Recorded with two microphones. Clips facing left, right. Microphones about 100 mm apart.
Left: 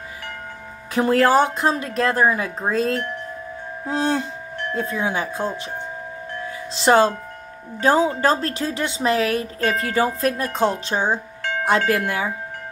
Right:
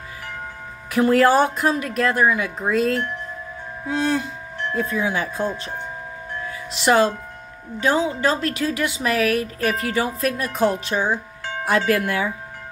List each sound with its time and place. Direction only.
0.9 s speech: 30° left (ahead or behind)
6.7 s speech: 30° left (ahead or behind)